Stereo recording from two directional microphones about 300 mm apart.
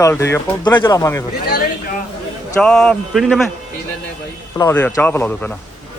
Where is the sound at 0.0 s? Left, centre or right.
Centre.